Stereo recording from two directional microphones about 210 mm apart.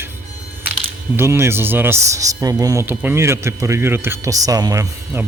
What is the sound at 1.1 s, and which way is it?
Speech, 10° right (ahead or behind).